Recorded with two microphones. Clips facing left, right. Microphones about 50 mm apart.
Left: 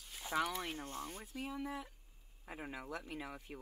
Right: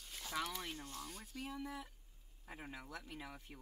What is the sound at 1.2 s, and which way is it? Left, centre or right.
Speech, centre.